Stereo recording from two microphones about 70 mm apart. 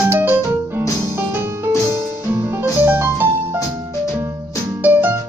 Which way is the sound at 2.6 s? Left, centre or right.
Right.